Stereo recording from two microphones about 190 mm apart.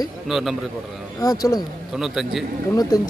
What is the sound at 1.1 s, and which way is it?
Speech, 20° left (ahead or behind).